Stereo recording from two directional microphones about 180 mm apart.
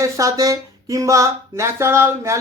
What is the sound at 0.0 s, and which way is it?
Speech, 15° right (ahead or behind).